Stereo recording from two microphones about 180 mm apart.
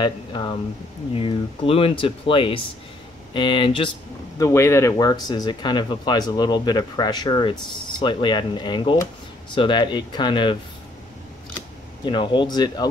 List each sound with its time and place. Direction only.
0.0 s speech: 25° left (ahead or behind)
4.4 s speech: 15° left (ahead or behind)
12.0 s speech: 25° left (ahead or behind)